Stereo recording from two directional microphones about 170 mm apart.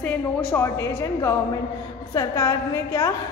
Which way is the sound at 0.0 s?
10° left (ahead or behind).